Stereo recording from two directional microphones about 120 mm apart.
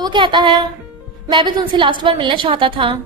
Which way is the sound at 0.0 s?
40° right (ahead or behind).